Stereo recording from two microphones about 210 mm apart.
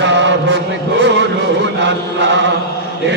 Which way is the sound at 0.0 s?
55° right (ahead or behind).